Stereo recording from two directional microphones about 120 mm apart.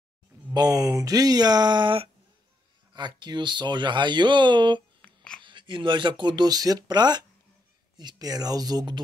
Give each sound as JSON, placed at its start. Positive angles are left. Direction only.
{"t": 0.5, "sound": "speech", "side_deg": -30}
{"t": 5.0, "sound": "a sound", "side_deg": 5}
{"t": 5.4, "sound": "speech", "side_deg": -40}